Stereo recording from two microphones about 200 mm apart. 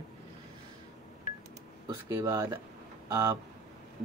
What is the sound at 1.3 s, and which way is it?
Telephone dialing, 45° left (ahead or behind).